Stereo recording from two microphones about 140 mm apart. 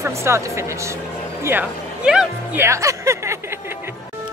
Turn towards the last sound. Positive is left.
turn(degrees=-20)  # may be behind; listen again after turning